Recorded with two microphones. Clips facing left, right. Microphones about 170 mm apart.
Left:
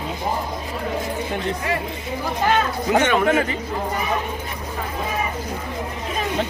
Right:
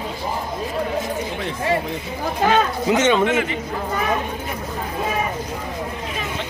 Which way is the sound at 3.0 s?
25° right (ahead or behind).